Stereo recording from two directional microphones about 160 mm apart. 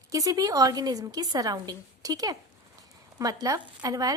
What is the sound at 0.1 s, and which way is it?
A woman's voice, 20° right (ahead or behind).